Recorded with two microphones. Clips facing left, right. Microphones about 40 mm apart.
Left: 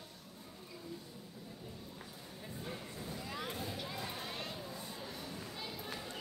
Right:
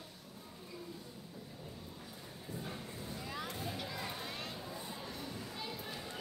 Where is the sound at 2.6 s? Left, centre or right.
Centre.